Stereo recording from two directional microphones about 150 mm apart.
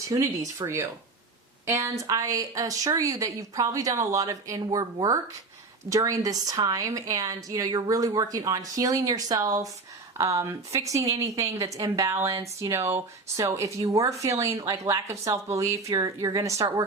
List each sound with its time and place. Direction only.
0.1 s speech: 25° right (ahead or behind)